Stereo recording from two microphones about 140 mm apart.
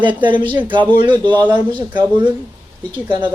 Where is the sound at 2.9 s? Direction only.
30° right (ahead or behind).